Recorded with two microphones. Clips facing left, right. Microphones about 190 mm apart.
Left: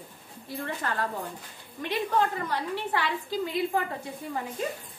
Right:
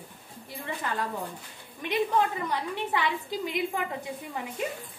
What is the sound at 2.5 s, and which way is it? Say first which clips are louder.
Speech: even; 15° right (ahead or behind).